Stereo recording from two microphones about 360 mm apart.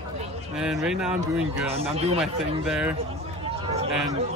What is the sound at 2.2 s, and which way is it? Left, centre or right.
Speech, centre.